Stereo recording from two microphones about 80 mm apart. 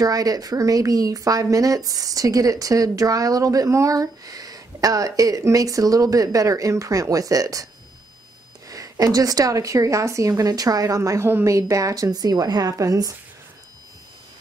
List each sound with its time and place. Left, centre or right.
0.0 s speech: right
8.6 s speech: right